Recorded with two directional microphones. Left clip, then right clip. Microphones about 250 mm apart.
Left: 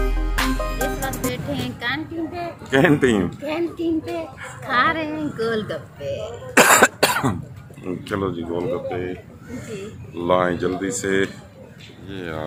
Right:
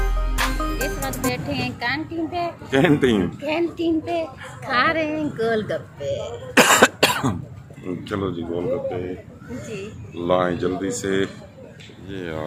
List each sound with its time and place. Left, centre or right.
0.8 s music: centre
1.3 s speech: left
1.8 s a woman's voice: centre
6.5 s cough: centre
7.9 s speech: centre
10.2 s a woman's voice: centre